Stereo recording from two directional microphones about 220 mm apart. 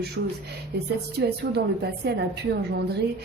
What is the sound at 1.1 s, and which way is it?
Speech, 45° right (ahead or behind).